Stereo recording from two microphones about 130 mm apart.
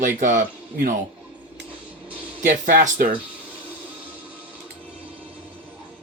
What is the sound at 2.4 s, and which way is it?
Speech, 85° right.